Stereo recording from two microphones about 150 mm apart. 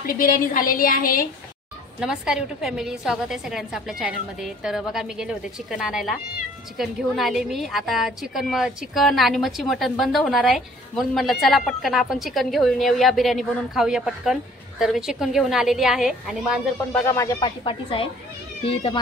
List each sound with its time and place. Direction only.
0.0 s a woman's voice: 75° left (ahead or behind)
2.0 s a woman's voice: 5° right (ahead or behind)
16.9 s speech: 15° left (ahead or behind)
17.6 s speech: 35° left (ahead or behind)